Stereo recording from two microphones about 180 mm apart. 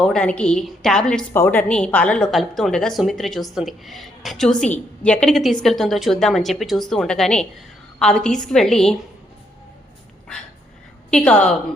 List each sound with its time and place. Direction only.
0.0 s a woman's voice: 5° left (ahead or behind)
11.1 s a woman's voice: 5° left (ahead or behind)